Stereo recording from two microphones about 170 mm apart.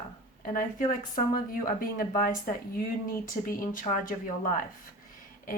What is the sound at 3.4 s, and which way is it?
Speech, 50° left (ahead or behind).